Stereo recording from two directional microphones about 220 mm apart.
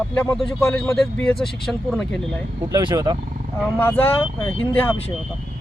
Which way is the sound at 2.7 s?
20° right (ahead or behind).